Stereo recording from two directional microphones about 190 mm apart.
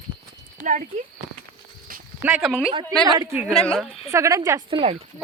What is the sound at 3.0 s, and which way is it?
Speech, 20° right (ahead or behind).